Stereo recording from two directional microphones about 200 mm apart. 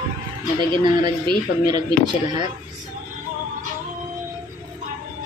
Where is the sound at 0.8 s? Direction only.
20° right (ahead or behind).